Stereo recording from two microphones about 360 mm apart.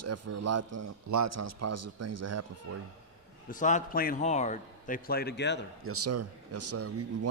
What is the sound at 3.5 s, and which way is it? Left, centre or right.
A man's voice, left.